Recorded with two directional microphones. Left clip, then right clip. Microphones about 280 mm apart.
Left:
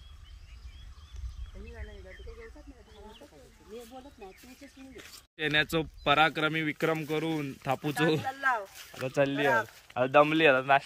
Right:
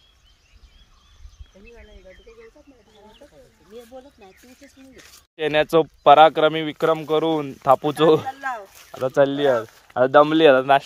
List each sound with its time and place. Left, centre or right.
1.8 s speech: right
3.7 s speech: right
4.9 s speech: centre
8.3 s speech: centre
9.0 s speech: centre